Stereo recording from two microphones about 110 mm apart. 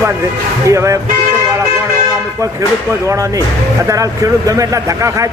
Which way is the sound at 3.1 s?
30° right (ahead or behind).